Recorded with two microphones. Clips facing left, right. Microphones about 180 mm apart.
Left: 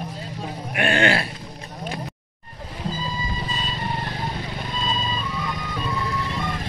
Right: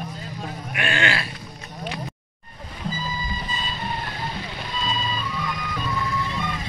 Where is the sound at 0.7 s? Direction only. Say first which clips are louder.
Left 5 dB; 50° left (ahead or behind).